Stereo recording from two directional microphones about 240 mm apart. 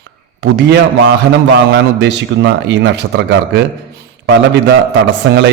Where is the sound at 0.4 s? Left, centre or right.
Right.